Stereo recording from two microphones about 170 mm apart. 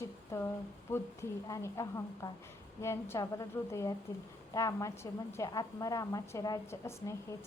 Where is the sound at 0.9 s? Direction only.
15° left (ahead or behind).